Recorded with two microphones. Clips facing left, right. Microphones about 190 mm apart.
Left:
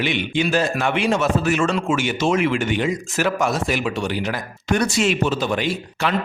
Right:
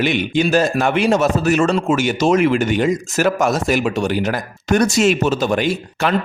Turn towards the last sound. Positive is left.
turn(degrees=-45)  # may be behind; listen again after turning